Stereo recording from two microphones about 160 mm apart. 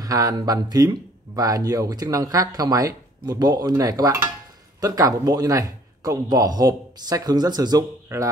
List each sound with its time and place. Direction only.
0.0 s speech: 20° right (ahead or behind)